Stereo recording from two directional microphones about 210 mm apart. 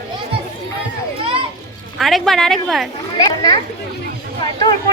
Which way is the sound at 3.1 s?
20° left (ahead or behind).